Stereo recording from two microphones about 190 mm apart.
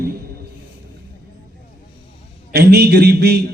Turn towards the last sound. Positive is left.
turn(degrees=-60)  # may be behind; listen again after turning